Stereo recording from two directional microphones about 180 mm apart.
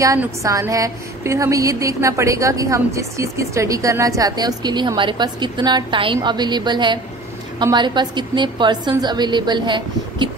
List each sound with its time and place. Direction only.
0.0 s a woman's voice: 15° right (ahead or behind)